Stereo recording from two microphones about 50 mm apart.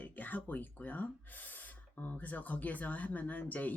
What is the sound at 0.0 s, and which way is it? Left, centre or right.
Speech, left.